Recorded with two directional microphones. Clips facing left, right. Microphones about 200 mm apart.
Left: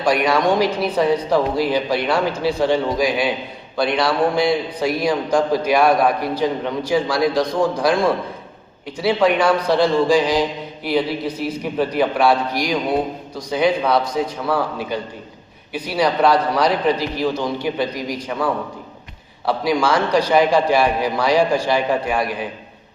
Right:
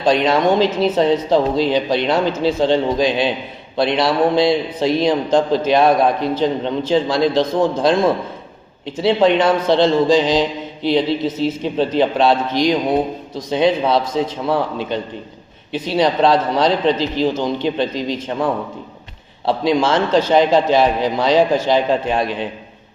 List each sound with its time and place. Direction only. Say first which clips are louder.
0.0 s a man's voice: right 2 dB; 20° right (ahead or behind)